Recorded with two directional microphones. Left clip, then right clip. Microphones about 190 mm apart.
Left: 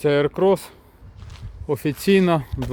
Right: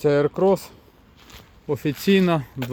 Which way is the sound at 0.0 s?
5° right (ahead or behind).